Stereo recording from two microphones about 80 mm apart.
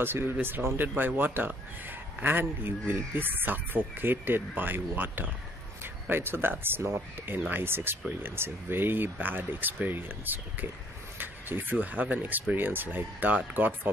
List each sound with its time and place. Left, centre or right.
0.0 s speech: right
11.1 s a sound: right
11.7 s speech: centre